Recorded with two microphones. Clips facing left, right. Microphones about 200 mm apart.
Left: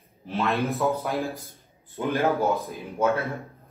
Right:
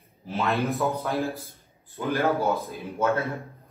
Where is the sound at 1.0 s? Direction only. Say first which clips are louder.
Right 1 dB; 15° left (ahead or behind).